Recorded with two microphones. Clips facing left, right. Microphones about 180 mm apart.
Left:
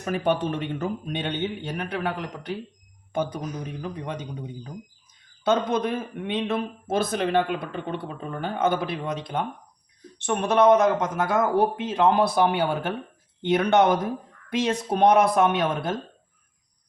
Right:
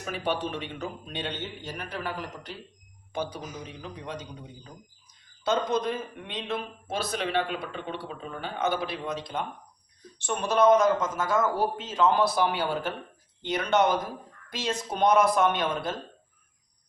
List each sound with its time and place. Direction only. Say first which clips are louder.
0.0 s speech: left 6 dB; 50° left (ahead or behind)
3.7 s speech: left 6 dB; 55° left (ahead or behind)
5.5 s speech: left 3 dB; 55° left (ahead or behind)